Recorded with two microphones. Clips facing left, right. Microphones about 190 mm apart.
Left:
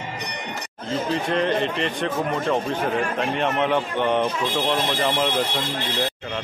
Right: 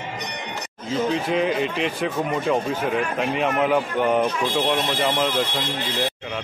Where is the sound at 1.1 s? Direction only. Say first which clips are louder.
Left 2 dB; 5° right (ahead or behind).